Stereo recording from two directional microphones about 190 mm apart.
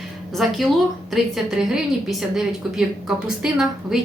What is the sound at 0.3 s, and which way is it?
A woman's voice, centre (ahead or behind).